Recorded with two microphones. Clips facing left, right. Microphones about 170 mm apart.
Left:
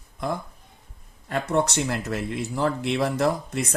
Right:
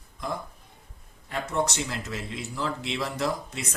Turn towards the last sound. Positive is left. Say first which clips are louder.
# left 6 dB
turn(degrees=55)  # may be behind; listen again after turning